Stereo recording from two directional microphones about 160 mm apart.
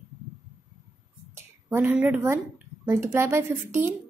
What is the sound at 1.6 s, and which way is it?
A woman's voice, 10° right (ahead or behind).